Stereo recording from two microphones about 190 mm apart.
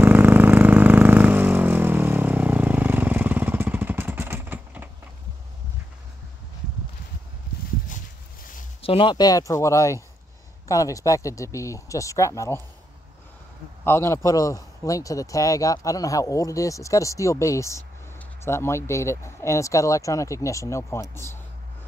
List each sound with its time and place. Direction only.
0.0 s vehicle: 10° right (ahead or behind)
8.8 s a man's voice: 25° left (ahead or behind)
13.8 s a man's voice: 15° left (ahead or behind)